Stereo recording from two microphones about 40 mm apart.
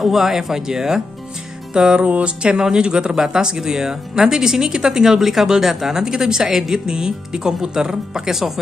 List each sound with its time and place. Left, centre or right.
0.0 s speech: centre
1.7 s music: right
2.0 s speech: right; by 8.5 s centre